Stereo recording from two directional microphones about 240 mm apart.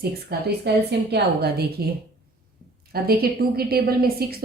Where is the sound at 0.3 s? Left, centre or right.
Right.